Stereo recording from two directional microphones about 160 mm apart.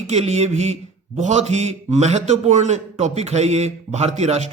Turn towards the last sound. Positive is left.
turn(degrees=-45)  # may be behind; listen again after turning